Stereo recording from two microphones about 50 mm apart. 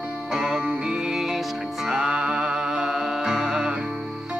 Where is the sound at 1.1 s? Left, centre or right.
Centre.